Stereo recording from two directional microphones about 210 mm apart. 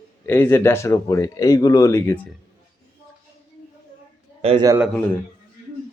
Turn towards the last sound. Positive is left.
turn(degrees=-5)  # may be behind; listen again after turning